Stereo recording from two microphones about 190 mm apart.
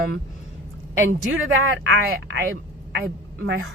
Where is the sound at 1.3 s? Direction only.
90° right.